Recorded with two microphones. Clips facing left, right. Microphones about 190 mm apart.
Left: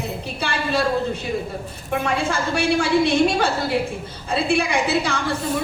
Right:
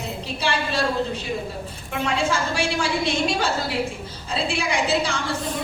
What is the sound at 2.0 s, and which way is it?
A woman's voice, 55° left (ahead or behind).